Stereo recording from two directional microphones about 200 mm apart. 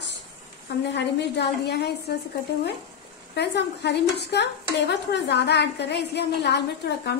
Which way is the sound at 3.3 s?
60° left (ahead or behind).